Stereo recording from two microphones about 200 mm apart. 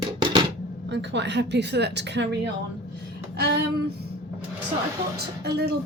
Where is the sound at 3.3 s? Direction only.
55° right (ahead or behind).